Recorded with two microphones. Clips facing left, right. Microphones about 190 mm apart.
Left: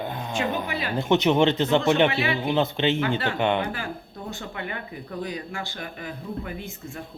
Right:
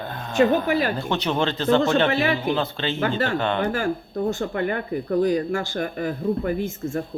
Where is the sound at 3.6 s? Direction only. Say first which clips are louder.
Right 7 dB; 45° right (ahead or behind).